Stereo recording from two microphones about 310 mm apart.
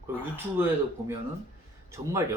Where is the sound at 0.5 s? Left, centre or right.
Centre.